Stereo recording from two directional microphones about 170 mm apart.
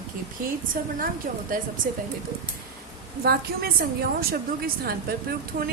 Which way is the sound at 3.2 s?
65° right (ahead or behind).